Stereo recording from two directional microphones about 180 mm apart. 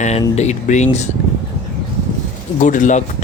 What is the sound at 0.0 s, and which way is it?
Speech, 40° left (ahead or behind).